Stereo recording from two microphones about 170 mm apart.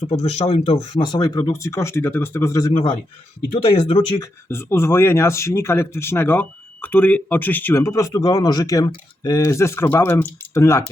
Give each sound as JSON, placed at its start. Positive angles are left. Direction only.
{"t": 0.1, "sound": "speech", "side_deg": 40}
{"t": 4.2, "sound": "speech", "side_deg": 15}